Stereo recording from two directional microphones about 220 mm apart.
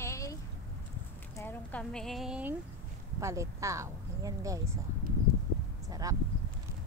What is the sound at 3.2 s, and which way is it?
Speech, 15° right (ahead or behind).